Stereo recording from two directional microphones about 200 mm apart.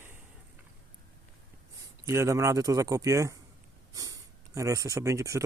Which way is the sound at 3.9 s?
15° right (ahead or behind).